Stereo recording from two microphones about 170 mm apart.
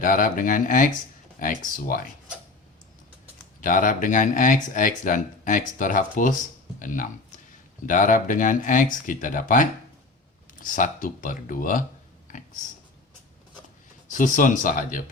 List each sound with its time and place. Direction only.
0.0 s speech: 55° left (ahead or behind)
3.6 s speech: 50° left (ahead or behind)
14.1 s speech: 50° left (ahead or behind)